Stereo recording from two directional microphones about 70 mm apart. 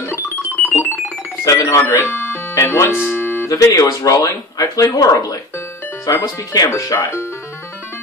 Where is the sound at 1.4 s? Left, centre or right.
Left.